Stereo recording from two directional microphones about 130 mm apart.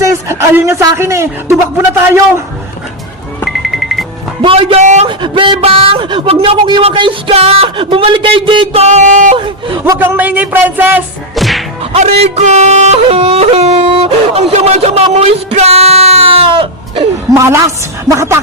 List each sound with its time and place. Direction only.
0.0 s a man's voice: 25° right (ahead or behind)
3.4 s music: centre (ahead or behind)
4.4 s yodeling: 45° right (ahead or behind)
5.0 s speech: 40° right (ahead or behind)
6.8 s yodeling: 40° right (ahead or behind)
8.9 s speech: 65° right (ahead or behind)
9.8 s speech: 20° right (ahead or behind)
11.3 s whack: centre (ahead or behind)
11.8 s yodeling: 55° right (ahead or behind)
17.3 s a woman's voice: 20° right (ahead or behind)